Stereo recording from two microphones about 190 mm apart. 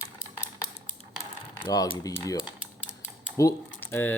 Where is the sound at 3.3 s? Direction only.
15° left (ahead or behind).